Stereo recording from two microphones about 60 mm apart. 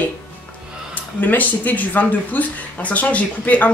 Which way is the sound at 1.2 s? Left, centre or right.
Left.